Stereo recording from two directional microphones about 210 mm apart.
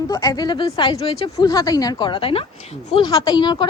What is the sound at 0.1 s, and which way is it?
A woman's voice, 15° left (ahead or behind).